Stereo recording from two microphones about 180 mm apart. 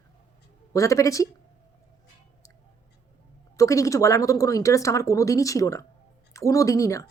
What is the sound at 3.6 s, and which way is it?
Speech, 20° left (ahead or behind).